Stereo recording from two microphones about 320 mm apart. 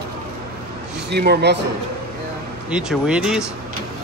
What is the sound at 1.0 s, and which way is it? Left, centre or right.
Speech, right.